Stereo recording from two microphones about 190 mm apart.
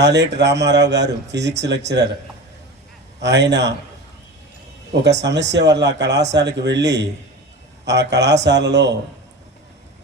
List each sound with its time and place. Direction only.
0.0 s speech: 65° right (ahead or behind)
3.2 s speech: 65° right (ahead or behind)
5.0 s speech: 65° right (ahead or behind)